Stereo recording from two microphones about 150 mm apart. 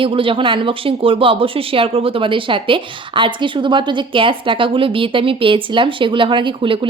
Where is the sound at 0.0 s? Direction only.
35° right (ahead or behind).